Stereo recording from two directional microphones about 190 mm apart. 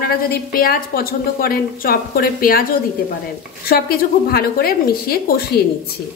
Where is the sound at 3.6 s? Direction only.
50° left (ahead or behind).